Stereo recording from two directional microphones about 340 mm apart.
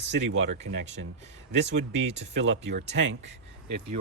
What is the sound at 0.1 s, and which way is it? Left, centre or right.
Speech, right.